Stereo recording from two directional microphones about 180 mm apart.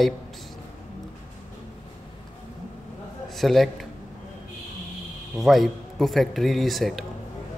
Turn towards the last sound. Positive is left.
turn(degrees=0)  # may be behind; listen again after turning